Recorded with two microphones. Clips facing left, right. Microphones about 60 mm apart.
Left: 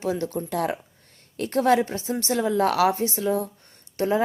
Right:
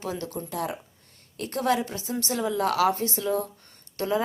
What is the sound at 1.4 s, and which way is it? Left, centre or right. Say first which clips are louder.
A woman's voice: left 5 dB; left.